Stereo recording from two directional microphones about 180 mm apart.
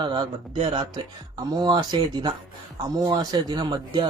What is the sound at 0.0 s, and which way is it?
Speech, 25° right (ahead or behind).